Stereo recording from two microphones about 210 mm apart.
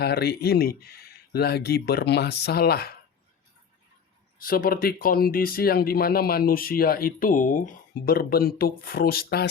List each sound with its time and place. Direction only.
0.0 s speech: 50° left (ahead or behind)
4.4 s speech: 45° left (ahead or behind)